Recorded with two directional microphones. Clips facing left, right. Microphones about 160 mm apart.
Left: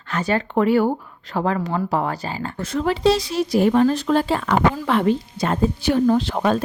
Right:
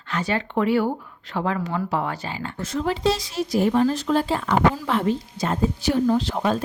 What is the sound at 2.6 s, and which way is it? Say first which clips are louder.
A woman's voice: left 4 dB; 65° left (ahead or behind).